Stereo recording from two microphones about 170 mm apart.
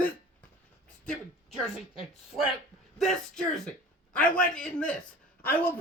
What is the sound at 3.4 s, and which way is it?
A man's voice, 5° left (ahead or behind).